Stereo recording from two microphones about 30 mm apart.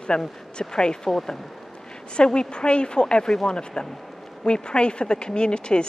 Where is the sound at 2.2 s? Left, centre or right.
Left.